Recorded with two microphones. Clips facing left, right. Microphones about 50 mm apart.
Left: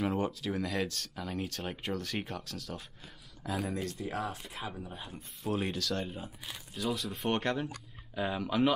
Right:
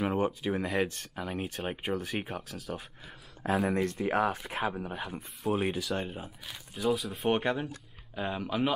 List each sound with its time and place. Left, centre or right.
0.0 s speech: centre
3.4 s speech: right
4.8 s speech: right
5.5 s speech: centre